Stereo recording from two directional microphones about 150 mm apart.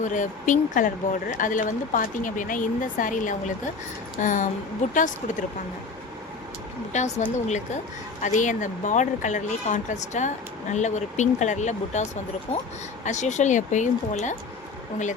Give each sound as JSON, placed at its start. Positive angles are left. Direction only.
{"t": 0.0, "sound": "speech", "side_deg": 55}
{"t": 6.9, "sound": "speech", "side_deg": 50}
{"t": 13.1, "sound": "speech", "side_deg": 50}